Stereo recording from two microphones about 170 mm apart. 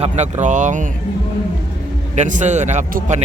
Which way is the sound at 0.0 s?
45° right (ahead or behind).